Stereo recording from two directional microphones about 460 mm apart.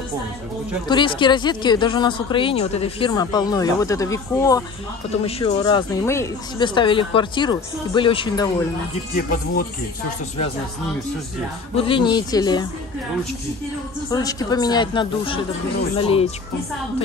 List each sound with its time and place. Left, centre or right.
0.8 s speech: centre
11.7 s speech: centre
14.1 s speech: centre